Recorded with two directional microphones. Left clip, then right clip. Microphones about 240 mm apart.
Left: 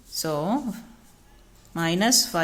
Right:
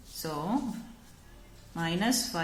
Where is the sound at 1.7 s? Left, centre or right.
Left.